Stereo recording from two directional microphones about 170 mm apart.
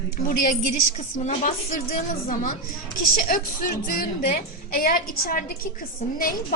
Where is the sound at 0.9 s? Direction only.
45° left (ahead or behind).